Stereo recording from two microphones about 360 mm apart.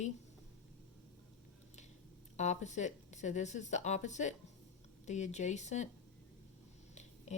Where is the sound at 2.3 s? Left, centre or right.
Centre.